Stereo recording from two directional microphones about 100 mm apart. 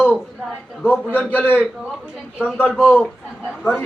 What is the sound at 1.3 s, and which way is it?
Speech, 15° left (ahead or behind).